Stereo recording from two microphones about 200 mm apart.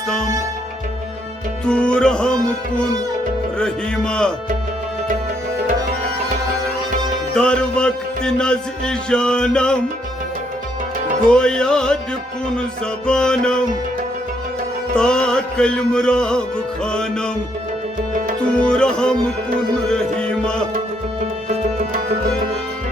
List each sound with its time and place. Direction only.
1.6 s music: 5° left (ahead or behind)
3.6 s music: 5° left (ahead or behind)
7.3 s music: 5° left (ahead or behind)
11.3 s music: 5° left (ahead or behind)
13.1 s music: 5° left (ahead or behind)
14.9 s music: 5° left (ahead or behind)
18.5 s music: 5° left (ahead or behind)
21.5 s music: 35° right (ahead or behind)